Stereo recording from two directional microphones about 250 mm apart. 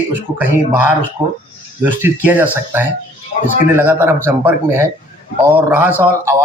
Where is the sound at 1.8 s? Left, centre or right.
Centre.